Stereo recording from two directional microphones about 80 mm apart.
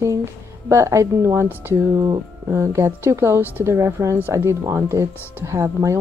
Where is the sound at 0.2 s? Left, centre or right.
Right.